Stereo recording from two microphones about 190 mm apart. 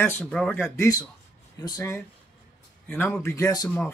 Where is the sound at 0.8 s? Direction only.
20° left (ahead or behind).